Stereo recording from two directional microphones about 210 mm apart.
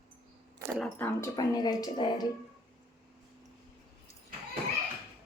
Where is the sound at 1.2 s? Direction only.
20° left (ahead or behind).